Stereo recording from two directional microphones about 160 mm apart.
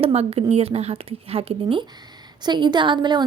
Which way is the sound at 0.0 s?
40° right (ahead or behind).